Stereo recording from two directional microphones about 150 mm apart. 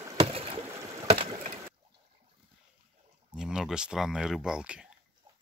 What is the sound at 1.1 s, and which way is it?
Wood, 40° right (ahead or behind).